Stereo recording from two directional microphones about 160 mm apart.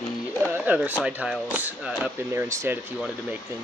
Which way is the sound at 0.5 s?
10° right (ahead or behind).